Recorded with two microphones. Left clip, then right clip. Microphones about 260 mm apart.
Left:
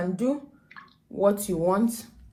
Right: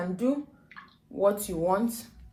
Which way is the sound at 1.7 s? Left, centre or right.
Left.